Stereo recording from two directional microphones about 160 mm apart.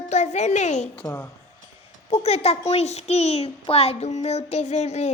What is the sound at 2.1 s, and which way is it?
A child's voice, 40° left (ahead or behind).